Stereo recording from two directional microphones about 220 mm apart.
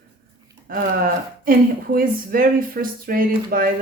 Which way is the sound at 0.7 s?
40° right (ahead or behind).